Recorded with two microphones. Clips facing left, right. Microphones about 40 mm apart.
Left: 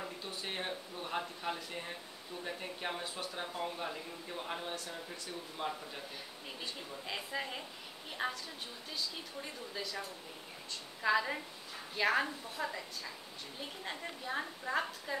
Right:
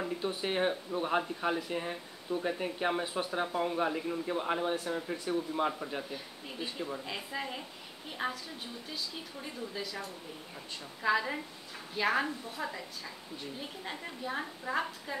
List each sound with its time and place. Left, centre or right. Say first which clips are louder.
0.0 s speech: right 8 dB; centre
7.1 s a woman's voice: right 2 dB; centre